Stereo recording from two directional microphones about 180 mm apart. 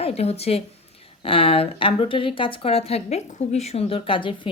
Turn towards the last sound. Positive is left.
turn(degrees=30)  # may be behind; listen again after turning